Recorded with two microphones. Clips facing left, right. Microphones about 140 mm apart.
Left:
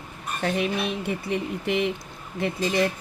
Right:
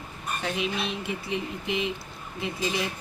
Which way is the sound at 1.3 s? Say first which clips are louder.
Left 4 dB; 60° left (ahead or behind).